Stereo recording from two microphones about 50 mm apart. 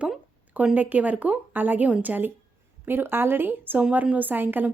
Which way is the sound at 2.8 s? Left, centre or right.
Right.